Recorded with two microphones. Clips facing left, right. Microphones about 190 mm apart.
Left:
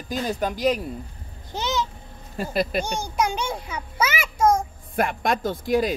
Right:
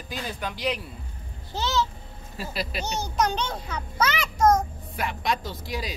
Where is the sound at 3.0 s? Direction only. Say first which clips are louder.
Left 1 dB; 10° left (ahead or behind).